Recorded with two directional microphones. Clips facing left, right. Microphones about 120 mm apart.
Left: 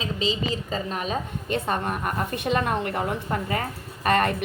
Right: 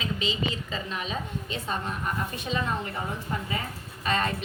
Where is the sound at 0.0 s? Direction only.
35° left (ahead or behind).